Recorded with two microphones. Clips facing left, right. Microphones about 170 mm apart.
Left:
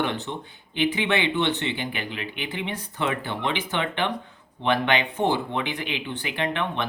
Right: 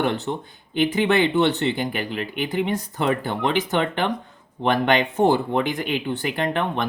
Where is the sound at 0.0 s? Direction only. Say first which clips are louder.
Right 4 dB; 40° right (ahead or behind).